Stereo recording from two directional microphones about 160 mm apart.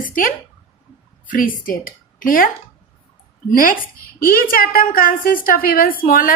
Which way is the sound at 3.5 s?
60° left (ahead or behind).